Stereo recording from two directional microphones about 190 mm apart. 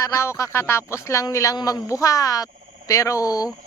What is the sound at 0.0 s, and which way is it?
Speech, 15° left (ahead or behind).